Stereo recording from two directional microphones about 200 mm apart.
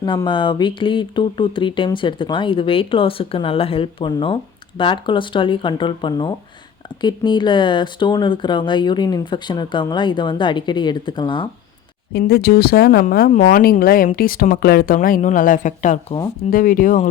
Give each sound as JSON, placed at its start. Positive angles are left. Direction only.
{"t": 0.0, "sound": "speech", "side_deg": 20}
{"t": 12.1, "sound": "speech", "side_deg": 50}